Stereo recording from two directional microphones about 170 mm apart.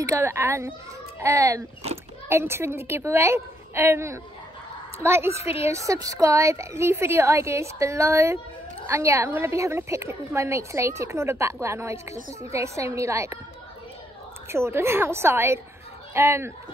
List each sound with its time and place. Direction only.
0.0 s a woman's voice: 15° right (ahead or behind)
14.5 s a woman's voice: 15° right (ahead or behind)